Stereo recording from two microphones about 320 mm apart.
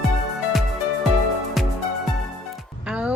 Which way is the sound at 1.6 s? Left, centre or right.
Centre.